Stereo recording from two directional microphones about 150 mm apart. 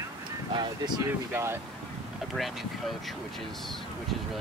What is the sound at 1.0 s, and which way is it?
Speech, 15° right (ahead or behind).